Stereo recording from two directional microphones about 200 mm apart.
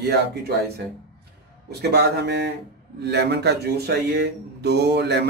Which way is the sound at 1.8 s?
55° right (ahead or behind).